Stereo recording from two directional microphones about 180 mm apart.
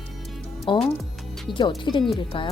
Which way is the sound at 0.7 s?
30° left (ahead or behind).